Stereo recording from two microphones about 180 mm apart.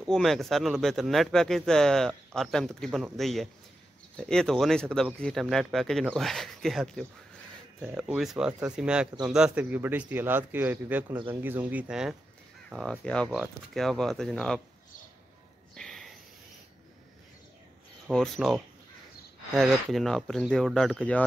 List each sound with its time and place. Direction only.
0.1 s speech: centre (ahead or behind)
15.7 s a sound: 5° left (ahead or behind)
18.0 s speech: centre (ahead or behind)